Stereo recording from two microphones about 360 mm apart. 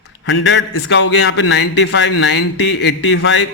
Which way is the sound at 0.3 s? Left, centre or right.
Left.